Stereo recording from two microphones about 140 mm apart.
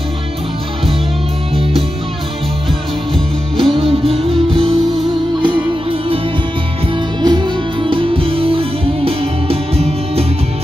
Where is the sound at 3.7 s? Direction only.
40° right (ahead or behind).